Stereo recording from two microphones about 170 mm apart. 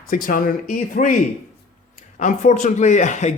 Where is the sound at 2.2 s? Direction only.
45° left (ahead or behind).